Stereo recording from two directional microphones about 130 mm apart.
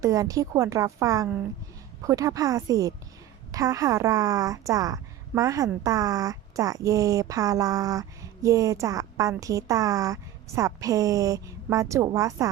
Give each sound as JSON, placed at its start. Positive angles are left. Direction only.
{"t": 0.0, "sound": "speech", "side_deg": -25}